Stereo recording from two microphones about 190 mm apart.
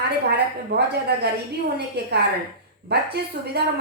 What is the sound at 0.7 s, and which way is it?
A woman's voice, 60° right (ahead or behind).